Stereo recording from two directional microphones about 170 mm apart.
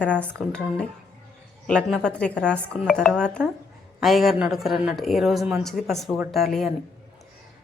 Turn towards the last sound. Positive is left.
turn(degrees=0)  # may be behind; listen again after turning